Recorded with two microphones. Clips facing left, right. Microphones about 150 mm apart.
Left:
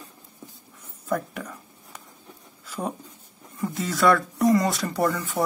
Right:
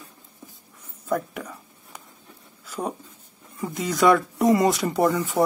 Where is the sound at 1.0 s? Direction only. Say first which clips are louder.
Right 1 dB; 10° right (ahead or behind).